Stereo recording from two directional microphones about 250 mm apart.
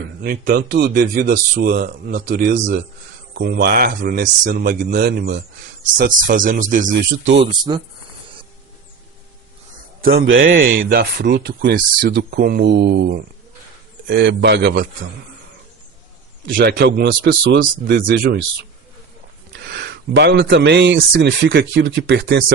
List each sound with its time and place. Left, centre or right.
0.2 s speech: right
7.3 s speech: centre
10.0 s speech: right
16.5 s speech: right
19.5 s speech: right